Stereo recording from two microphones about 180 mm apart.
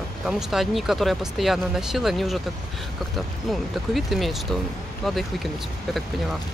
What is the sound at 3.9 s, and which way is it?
Speech, centre (ahead or behind).